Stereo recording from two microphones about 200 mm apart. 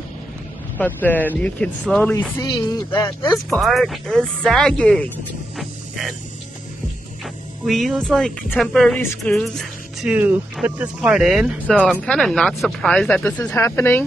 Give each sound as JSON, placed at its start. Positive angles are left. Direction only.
{"t": 0.7, "sound": "speech", "side_deg": 10}
{"t": 3.0, "sound": "speech", "side_deg": 20}
{"t": 3.4, "sound": "speech", "side_deg": 0}
{"t": 5.6, "sound": "a sound", "side_deg": 0}
{"t": 7.6, "sound": "speech", "side_deg": 0}